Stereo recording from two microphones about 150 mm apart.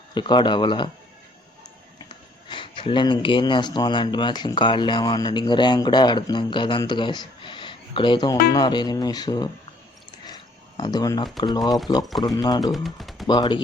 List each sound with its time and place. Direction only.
0.1 s speech: 30° left (ahead or behind)
2.0 s speech: 35° left (ahead or behind)
10.8 s speech: 30° left (ahead or behind)
12.7 s speech: centre (ahead or behind)
13.2 s speech: 30° left (ahead or behind)